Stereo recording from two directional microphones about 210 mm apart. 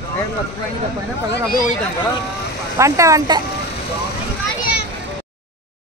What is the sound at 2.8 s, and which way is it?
Speech, 15° right (ahead or behind).